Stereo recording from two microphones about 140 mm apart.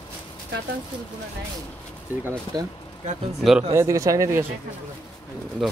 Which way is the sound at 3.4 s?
Centre (ahead or behind).